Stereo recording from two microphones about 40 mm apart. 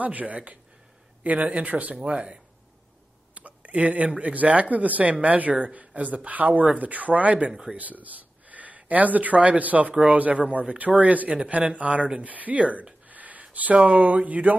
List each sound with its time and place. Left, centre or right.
0.0 s speech: right
2.1 s speech: right
3.3 s speech: right
13.1 s a sound: right
13.7 s speech: right